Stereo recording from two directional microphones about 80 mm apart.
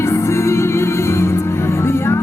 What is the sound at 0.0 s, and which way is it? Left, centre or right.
Music, left.